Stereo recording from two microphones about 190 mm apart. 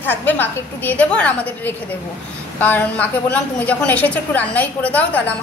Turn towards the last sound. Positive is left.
turn(degrees=10)  # may be behind; listen again after turning